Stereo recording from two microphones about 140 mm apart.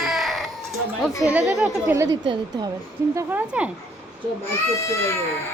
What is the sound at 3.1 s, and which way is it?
Speech, 15° right (ahead or behind).